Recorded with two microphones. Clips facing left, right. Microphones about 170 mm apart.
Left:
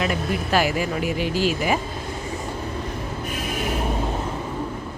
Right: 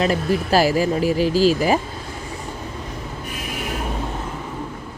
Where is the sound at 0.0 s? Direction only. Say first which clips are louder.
Right 4 dB; 35° right (ahead or behind).